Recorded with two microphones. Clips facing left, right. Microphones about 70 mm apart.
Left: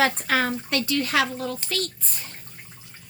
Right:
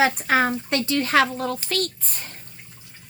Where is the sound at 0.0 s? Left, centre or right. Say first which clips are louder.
Right 3 dB; right.